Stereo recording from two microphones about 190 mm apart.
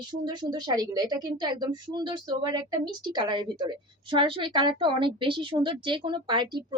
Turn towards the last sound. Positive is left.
turn(degrees=-25)  # may be behind; listen again after turning